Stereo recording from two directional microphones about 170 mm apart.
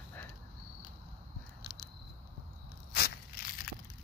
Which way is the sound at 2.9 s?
60° left (ahead or behind).